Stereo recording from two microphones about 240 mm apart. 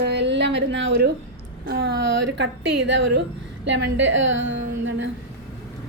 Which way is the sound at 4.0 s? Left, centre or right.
Right.